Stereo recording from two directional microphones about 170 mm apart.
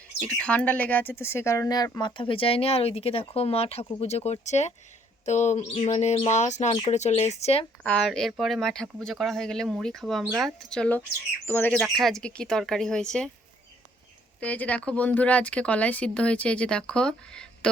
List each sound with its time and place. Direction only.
0.3 s speech: 5° left (ahead or behind); by 4.7 s 40° left (ahead or behind)
5.2 s bird: 45° left (ahead or behind)
6.3 s speech: 45° left (ahead or behind)
7.9 s speech: 5° left (ahead or behind)
14.4 s speech: 10° left (ahead or behind)